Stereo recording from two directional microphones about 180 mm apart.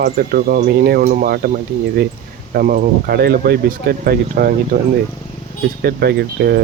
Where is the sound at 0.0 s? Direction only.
55° right (ahead or behind).